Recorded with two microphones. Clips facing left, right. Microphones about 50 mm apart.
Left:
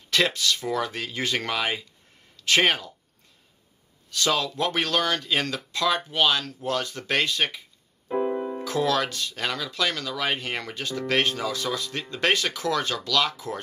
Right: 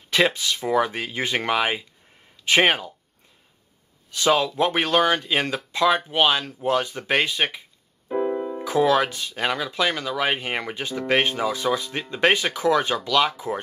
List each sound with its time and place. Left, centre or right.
0.1 s speech: centre
4.1 s speech: right
8.1 s music: centre
8.5 s speech: centre